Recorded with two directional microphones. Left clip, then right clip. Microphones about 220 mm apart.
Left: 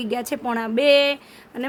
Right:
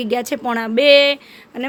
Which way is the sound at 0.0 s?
10° right (ahead or behind).